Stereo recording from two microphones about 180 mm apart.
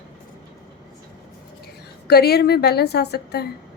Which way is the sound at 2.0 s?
60° left (ahead or behind).